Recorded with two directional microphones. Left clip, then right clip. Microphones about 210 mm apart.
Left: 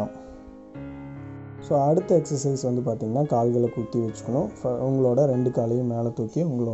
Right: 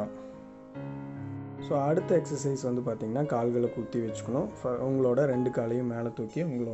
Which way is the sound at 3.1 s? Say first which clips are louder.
Left 6 dB; 15° right (ahead or behind).